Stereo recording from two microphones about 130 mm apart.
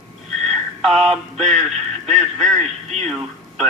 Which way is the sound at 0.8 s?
5° left (ahead or behind).